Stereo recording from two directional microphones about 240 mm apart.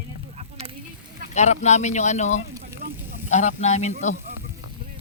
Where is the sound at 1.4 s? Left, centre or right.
Left.